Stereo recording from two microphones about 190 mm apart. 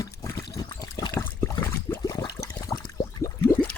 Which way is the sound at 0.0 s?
15° left (ahead or behind).